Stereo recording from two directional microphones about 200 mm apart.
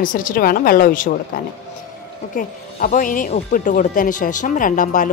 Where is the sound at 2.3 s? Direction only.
45° left (ahead or behind).